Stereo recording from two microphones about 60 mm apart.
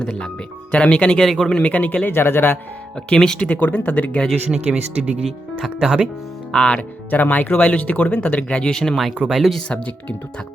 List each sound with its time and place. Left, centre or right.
0.7 s speech: centre
1.3 s speech: centre
1.5 s speech: left
2.1 s speech: left
2.9 s speech: centre
4.3 s speech: centre
6.5 s speech: centre
7.1 s speech: left; by 9.6 s centre
9.6 s speech: left